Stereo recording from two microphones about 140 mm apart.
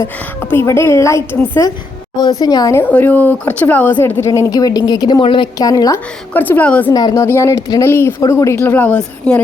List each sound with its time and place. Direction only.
0.5 s a woman's voice: 20° left (ahead or behind)
2.8 s a woman's voice: 10° left (ahead or behind)
6.3 s speech: 15° left (ahead or behind)
6.9 s a woman's voice: 25° left (ahead or behind); by 9.4 s 5° left (ahead or behind)